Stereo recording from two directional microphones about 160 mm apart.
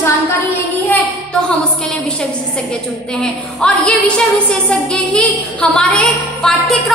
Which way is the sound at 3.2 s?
5° left (ahead or behind).